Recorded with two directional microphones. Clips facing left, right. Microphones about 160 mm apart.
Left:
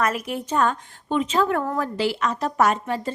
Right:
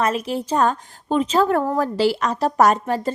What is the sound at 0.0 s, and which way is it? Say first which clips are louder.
A woman's voice: right 3 dB; 30° right (ahead or behind).